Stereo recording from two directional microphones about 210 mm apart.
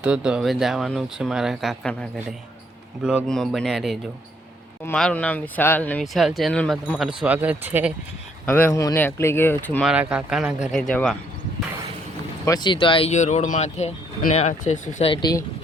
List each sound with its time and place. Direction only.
0.0 s speech: 5° right (ahead or behind)
8.4 s speech: 10° left (ahead or behind)
9.9 s speech: 5° right (ahead or behind)
12.5 s speech: 20° left (ahead or behind)